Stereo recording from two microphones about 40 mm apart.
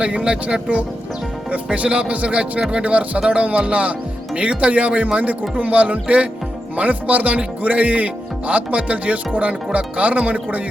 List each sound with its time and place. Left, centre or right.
0.0 s speech: right